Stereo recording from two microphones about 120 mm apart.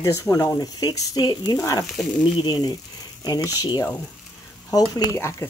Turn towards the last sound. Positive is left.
turn(degrees=25)  # may be behind; listen again after turning